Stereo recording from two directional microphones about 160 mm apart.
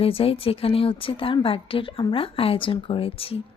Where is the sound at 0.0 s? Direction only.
35° left (ahead or behind).